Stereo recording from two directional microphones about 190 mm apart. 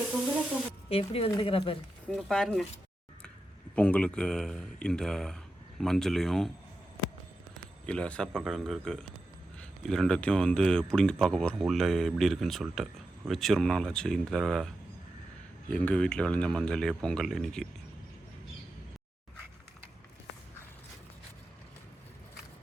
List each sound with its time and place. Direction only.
0.9 s a woman's voice: 30° left (ahead or behind)
2.0 s speech: 5° left (ahead or behind)
3.8 s speech: 5° left (ahead or behind)
7.9 s speech: 5° left (ahead or behind)
15.7 s speech: 5° left (ahead or behind)